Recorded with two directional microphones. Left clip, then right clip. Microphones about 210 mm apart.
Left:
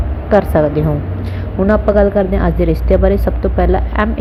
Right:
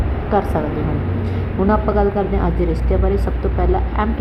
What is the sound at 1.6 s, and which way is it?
Speech, 20° left (ahead or behind).